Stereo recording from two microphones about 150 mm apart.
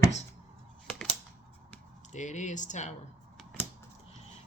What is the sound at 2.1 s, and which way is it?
Speech, 50° left (ahead or behind).